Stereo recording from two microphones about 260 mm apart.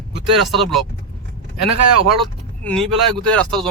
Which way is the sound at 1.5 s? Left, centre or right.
Right.